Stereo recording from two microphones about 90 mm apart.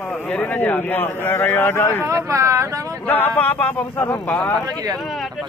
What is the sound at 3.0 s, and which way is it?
Speech, 20° left (ahead or behind).